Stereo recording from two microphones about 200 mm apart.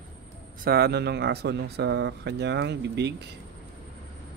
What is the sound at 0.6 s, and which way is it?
Speech, 50° right (ahead or behind).